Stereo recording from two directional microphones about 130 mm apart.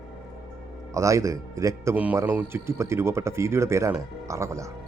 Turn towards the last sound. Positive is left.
turn(degrees=-25)  # may be behind; listen again after turning